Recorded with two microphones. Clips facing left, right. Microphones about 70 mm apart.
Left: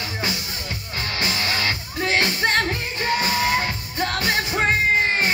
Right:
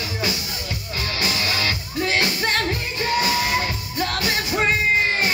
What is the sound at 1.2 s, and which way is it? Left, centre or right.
Music, left.